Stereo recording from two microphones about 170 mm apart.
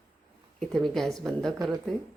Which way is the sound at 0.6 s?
Centre (ahead or behind).